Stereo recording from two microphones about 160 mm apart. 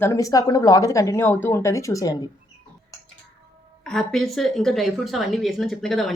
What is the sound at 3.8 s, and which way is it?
A woman's voice, 5° left (ahead or behind).